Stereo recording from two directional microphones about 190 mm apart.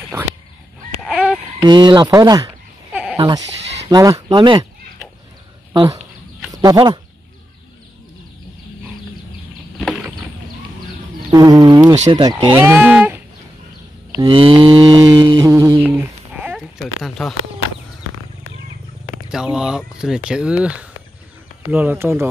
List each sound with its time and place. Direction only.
0.1 s a sound: 10° right (ahead or behind)
1.6 s speech: 25° right (ahead or behind)
2.9 s dog: 5° right (ahead or behind)
3.9 s speech: 20° right (ahead or behind)
6.6 s speech: 20° right (ahead or behind)
9.8 s a sound: centre (ahead or behind)
11.3 s speech: 20° right (ahead or behind)
14.1 s mantra: 25° right (ahead or behind); by 17.3 s centre (ahead or behind)
19.2 s speech: 5° right (ahead or behind)